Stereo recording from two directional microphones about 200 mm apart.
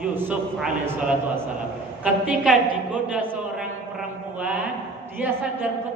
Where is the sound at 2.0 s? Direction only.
5° right (ahead or behind).